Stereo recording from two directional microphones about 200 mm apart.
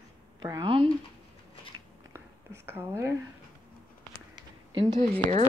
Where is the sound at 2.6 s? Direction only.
10° right (ahead or behind).